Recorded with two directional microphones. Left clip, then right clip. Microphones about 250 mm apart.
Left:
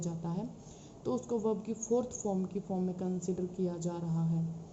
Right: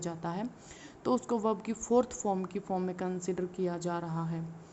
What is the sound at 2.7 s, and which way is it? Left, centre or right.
A woman's voice, right.